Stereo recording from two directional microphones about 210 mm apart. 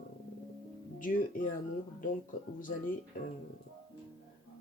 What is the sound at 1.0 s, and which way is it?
Speech, 40° left (ahead or behind).